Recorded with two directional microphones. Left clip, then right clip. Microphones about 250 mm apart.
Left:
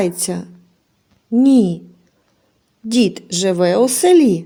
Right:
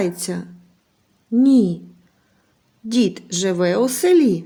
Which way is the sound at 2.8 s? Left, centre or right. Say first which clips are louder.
Left 3 dB; centre.